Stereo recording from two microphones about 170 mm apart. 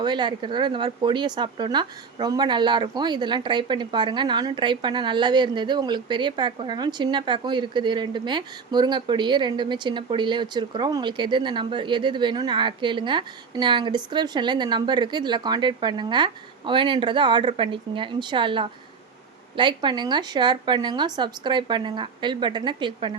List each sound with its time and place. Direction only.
0.0 s speech: 25° right (ahead or behind)